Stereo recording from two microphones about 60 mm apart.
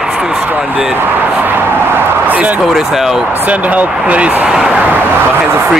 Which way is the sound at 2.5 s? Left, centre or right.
Centre.